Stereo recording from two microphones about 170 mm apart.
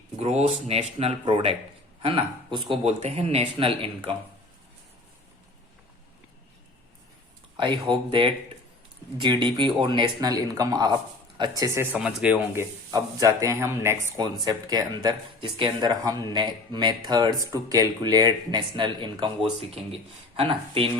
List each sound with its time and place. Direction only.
0.2 s speech: 40° right (ahead or behind)
3.0 s speech: 40° right (ahead or behind)
7.5 s speech: 25° right (ahead or behind)
11.9 s speech: 5° right (ahead or behind)
12.9 s speech: 20° right (ahead or behind)